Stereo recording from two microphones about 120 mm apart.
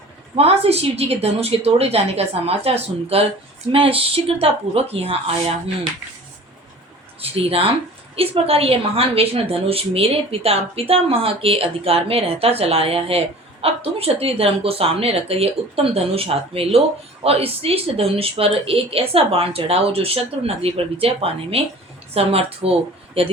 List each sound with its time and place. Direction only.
0.3 s a woman's voice: 55° right (ahead or behind)
7.2 s a woman's voice: 55° right (ahead or behind)